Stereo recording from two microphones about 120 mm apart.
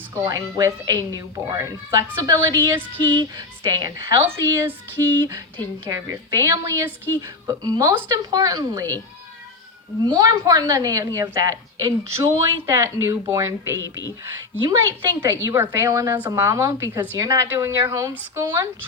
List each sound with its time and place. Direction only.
0.1 s a woman's voice: 25° right (ahead or behind)
4.6 s a woman's voice: 20° right (ahead or behind)
10.0 s a woman's voice: 30° right (ahead or behind)